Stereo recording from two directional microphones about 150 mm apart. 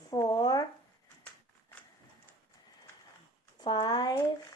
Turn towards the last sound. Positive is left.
turn(degrees=30)  # may be behind; listen again after turning